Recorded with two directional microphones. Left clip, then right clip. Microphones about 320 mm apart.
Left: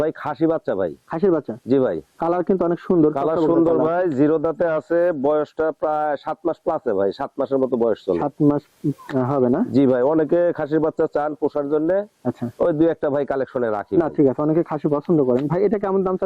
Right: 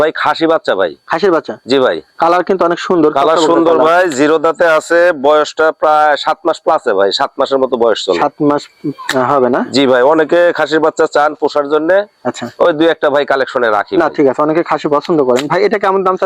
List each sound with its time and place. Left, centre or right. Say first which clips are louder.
0.0 s speech: right 10 dB; centre
15.4 s speech: right 8 dB; centre